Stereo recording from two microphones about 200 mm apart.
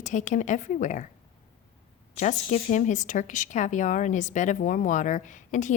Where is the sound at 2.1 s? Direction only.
35° left (ahead or behind).